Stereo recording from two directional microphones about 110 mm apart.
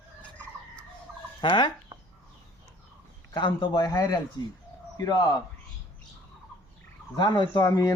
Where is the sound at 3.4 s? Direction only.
45° left (ahead or behind).